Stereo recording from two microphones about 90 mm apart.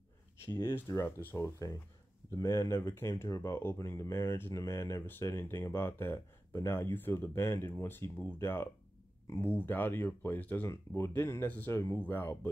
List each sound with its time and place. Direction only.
1.0 s speech: 25° left (ahead or behind)